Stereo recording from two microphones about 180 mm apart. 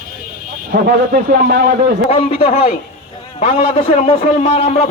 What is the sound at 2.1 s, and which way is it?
A man's voice, 35° left (ahead or behind).